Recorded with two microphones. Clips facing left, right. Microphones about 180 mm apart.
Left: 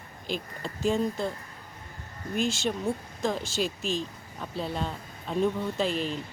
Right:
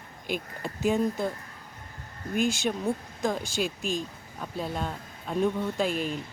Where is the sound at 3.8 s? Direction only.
50° right (ahead or behind).